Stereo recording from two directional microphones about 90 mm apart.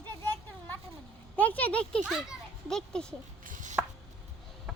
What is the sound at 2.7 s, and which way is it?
Speech, 5° left (ahead or behind).